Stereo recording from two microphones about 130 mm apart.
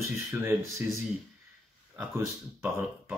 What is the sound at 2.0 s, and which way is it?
Speech, 15° right (ahead or behind).